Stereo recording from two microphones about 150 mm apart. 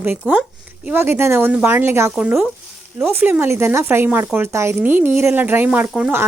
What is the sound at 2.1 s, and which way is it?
Speech, 5° right (ahead or behind).